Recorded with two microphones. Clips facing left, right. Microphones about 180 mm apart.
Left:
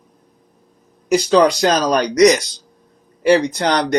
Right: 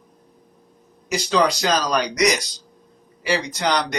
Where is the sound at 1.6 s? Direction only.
55° left (ahead or behind).